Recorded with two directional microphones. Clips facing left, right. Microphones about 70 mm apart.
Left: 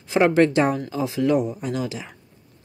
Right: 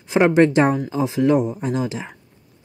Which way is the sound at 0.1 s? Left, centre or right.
Right.